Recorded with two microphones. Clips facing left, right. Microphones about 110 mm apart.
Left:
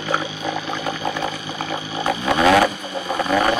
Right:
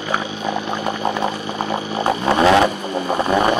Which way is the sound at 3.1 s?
25° right (ahead or behind).